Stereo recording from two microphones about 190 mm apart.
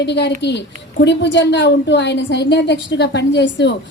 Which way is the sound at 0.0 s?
65° left (ahead or behind).